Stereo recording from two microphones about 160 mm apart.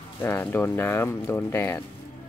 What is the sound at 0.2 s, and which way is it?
Speech, 15° left (ahead or behind).